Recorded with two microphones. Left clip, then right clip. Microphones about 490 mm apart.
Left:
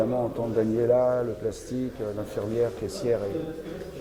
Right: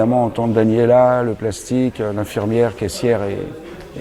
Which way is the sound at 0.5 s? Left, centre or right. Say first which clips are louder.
Right 10 dB; right.